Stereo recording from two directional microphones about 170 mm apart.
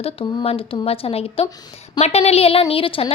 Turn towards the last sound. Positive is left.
turn(degrees=30)  # may be behind; listen again after turning